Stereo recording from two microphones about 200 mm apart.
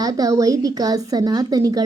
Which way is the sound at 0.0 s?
15° right (ahead or behind).